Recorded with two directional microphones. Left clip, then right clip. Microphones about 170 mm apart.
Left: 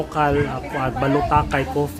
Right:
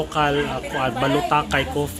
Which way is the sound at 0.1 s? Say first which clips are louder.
Left 2 dB; 25° left (ahead or behind).